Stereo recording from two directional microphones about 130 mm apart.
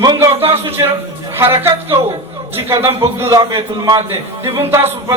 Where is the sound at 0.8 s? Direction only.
25° right (ahead or behind).